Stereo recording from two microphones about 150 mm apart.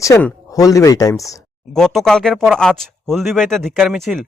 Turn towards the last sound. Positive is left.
turn(degrees=0)  # may be behind; listen again after turning